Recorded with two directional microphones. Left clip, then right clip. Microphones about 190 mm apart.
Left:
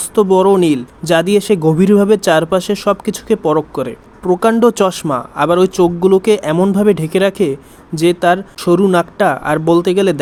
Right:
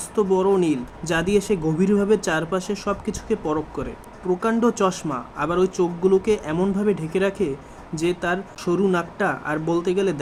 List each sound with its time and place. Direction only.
0.2 s speech: 40° left (ahead or behind)